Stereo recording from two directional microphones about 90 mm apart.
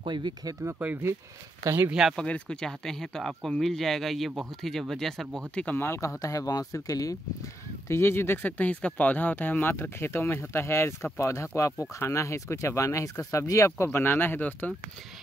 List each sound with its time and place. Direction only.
0.0 s speech: 60° right (ahead or behind)
0.7 s speech: 25° right (ahead or behind)
1.8 s speech: 10° right (ahead or behind)
2.1 s speech: 10° left (ahead or behind)
5.7 s speech: 25° left (ahead or behind)
5.9 s speech: 40° left (ahead or behind)
7.9 s speech: 30° left (ahead or behind)